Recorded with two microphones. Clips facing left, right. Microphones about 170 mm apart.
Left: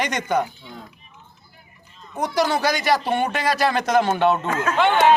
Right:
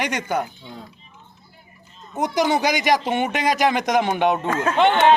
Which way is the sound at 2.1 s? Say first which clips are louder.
Right 1 dB; 20° right (ahead or behind).